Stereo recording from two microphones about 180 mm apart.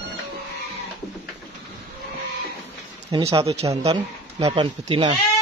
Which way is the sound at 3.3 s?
35° right (ahead or behind).